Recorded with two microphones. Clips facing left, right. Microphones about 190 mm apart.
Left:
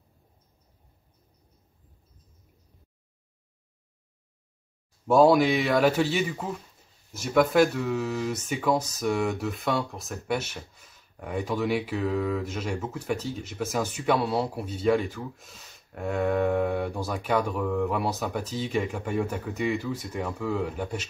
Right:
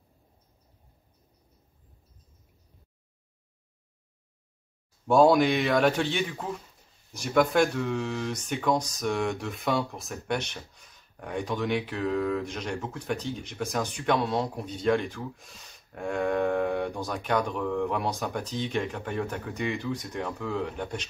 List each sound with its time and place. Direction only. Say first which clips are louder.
5.0 s speech: left 1 dB; centre (ahead or behind)